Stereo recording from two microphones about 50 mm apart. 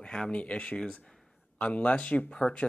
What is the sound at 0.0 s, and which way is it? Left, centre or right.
Speech, centre.